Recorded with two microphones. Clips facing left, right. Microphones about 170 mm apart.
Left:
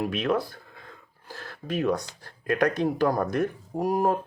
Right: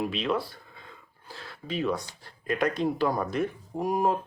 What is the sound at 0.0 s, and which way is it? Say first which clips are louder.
Speech: left 3 dB; 50° left (ahead or behind).